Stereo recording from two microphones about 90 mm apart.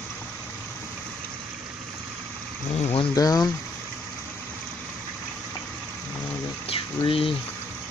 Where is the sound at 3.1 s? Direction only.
45° left (ahead or behind).